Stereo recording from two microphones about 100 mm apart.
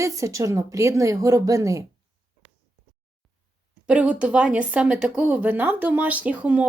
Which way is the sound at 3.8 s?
10° right (ahead or behind).